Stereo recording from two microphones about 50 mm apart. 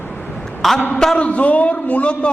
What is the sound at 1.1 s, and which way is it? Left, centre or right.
A man's voice, left.